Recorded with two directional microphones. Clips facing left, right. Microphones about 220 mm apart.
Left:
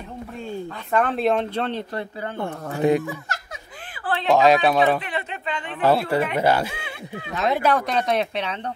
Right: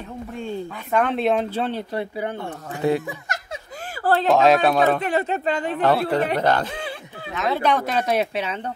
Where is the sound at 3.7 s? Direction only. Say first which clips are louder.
Right 7 dB; 45° right (ahead or behind).